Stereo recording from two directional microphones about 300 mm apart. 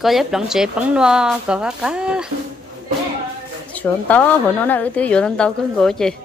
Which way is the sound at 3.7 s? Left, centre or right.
Centre.